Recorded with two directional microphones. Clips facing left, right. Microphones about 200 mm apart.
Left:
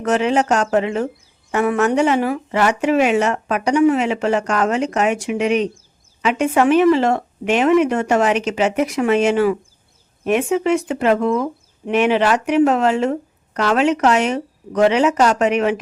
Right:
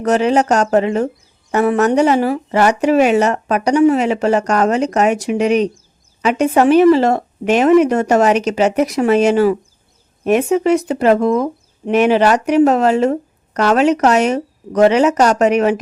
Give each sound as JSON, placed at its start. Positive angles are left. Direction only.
{"t": 0.0, "sound": "speech", "side_deg": -40}